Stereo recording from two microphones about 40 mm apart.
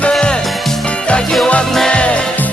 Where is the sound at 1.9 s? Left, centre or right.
Left.